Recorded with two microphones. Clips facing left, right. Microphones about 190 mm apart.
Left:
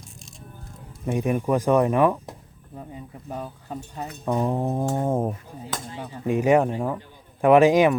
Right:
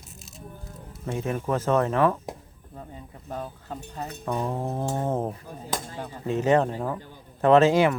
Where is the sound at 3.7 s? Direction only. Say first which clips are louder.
Left 3 dB; 15° left (ahead or behind).